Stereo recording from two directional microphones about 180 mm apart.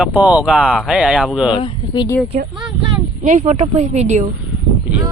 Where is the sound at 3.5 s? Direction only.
40° right (ahead or behind).